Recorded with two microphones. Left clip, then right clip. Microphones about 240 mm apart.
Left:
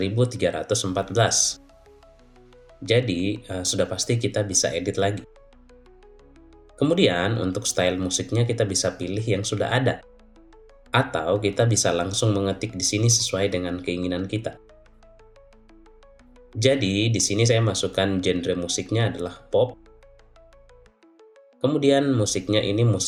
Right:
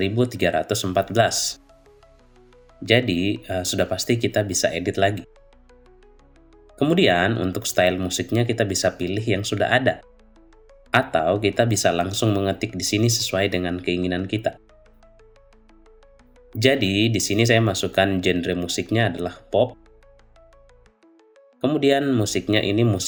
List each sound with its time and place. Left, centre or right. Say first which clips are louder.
0.0 s speech: right 2 dB; right
2.8 s speech: right 3 dB; right
6.7 s speech: right 2 dB; right
11.1 s speech: right 3 dB; right
16.6 s speech: right 2 dB; right
21.6 s speech: right 1 dB; right